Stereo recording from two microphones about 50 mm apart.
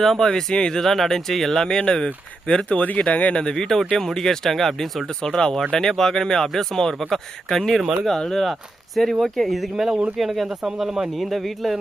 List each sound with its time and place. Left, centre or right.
0.0 s speech: centre; by 3.0 s left
3.3 s speech: centre
11.3 s speech: centre